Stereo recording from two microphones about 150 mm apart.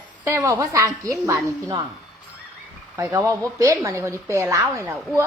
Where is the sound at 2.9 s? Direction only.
20° right (ahead or behind).